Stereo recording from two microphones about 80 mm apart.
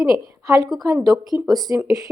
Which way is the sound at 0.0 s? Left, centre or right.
Right.